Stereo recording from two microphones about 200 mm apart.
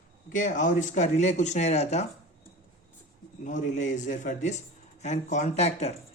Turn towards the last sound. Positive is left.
turn(degrees=35)  # may be behind; listen again after turning